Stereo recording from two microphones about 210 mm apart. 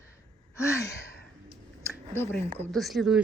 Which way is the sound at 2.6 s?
Centre (ahead or behind).